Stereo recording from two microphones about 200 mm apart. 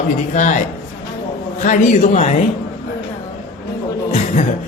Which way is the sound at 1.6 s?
40° left (ahead or behind).